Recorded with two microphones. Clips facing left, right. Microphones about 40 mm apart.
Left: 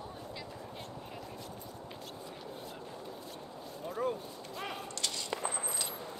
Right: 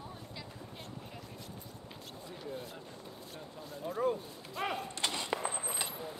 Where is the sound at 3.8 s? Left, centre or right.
Centre.